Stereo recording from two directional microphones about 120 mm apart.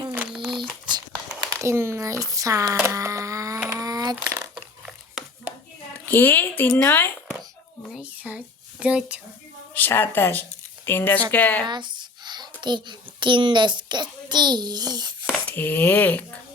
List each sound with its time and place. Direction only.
0.3 s a sound: 5° right (ahead or behind)
0.6 s crumpling: 35° right (ahead or behind)
1.5 s speech: 25° right (ahead or behind)
2.8 s a sound: 25° right (ahead or behind)
4.1 s speech: 20° right (ahead or behind)
5.2 s a sound: 5° right (ahead or behind)
6.1 s speech: 15° left (ahead or behind)
7.9 s a sound: 10° right (ahead or behind)
8.8 s speech: 10° right (ahead or behind)
9.7 s speech: 15° left (ahead or behind)
11.6 s a child's voice: 40° right (ahead or behind)
15.4 s speech: 15° left (ahead or behind)